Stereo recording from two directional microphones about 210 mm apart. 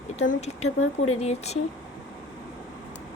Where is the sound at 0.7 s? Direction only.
80° left.